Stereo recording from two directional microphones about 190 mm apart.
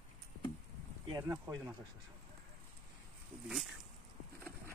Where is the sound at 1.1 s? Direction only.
20° right (ahead or behind).